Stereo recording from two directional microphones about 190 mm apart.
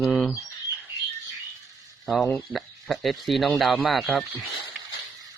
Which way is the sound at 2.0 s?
Centre (ahead or behind).